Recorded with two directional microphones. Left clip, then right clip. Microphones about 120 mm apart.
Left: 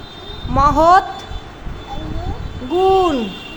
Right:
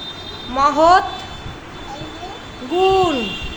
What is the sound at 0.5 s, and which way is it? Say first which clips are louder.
Speech: left 1 dB; 40° left (ahead or behind).